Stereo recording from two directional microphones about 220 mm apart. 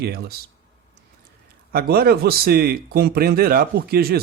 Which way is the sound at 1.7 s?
45° right (ahead or behind).